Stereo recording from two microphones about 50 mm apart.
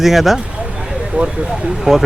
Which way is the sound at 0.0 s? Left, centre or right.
Centre.